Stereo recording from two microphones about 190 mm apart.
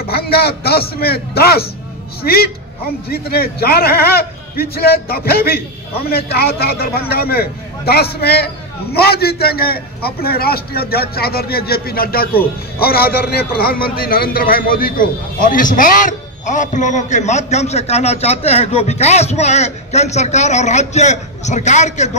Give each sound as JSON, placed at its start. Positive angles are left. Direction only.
{"t": 0.0, "sound": "a man's voice", "side_deg": 55}